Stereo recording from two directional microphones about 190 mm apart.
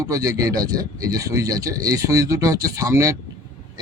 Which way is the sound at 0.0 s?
15° right (ahead or behind).